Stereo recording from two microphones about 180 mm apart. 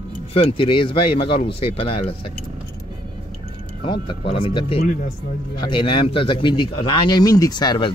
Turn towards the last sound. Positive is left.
turn(degrees=25)  # may be behind; listen again after turning